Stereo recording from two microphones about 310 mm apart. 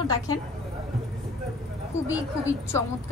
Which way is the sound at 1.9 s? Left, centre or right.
Centre.